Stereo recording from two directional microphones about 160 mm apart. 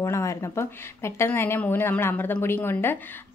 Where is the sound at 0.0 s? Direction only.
20° left (ahead or behind).